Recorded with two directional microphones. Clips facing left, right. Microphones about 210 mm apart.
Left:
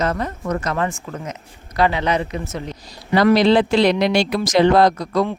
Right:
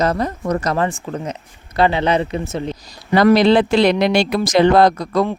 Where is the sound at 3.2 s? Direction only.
55° right (ahead or behind).